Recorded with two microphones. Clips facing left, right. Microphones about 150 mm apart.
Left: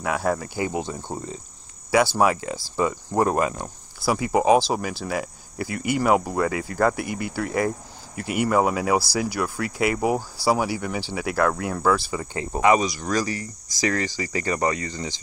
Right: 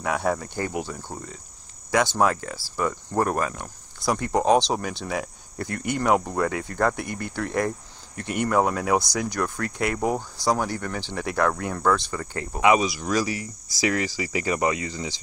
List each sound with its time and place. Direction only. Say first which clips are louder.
0.0 s speech: left 1 dB; centre (ahead or behind)
0.7 s speech: left 3 dB; 20° left (ahead or behind)
1.9 s speech: left 2 dB; 5° left (ahead or behind)
4.0 s speech: left 2 dB; 5° left (ahead or behind)
12.6 s speech: even; 5° right (ahead or behind)